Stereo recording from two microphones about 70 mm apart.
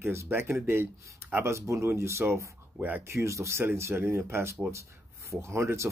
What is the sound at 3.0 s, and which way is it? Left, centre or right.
Speech, right.